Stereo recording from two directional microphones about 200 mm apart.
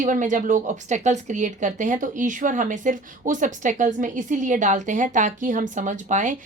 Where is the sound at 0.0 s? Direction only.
40° right (ahead or behind).